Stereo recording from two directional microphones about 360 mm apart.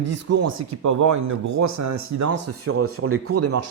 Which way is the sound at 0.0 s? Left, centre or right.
Right.